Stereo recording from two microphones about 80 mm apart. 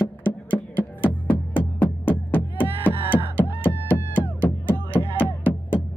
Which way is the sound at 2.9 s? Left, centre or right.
Right.